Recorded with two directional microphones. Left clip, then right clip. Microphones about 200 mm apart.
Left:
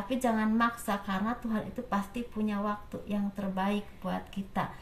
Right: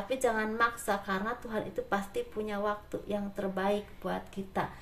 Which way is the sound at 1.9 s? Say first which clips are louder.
Right 1 dB; 40° right (ahead or behind).